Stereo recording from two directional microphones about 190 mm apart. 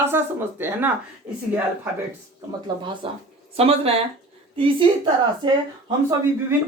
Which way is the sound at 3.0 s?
30° right (ahead or behind).